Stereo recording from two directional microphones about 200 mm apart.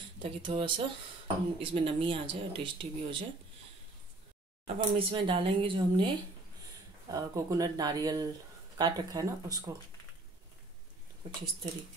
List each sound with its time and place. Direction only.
0.2 s speech: 25° right (ahead or behind)
4.7 s speech: 25° right (ahead or behind)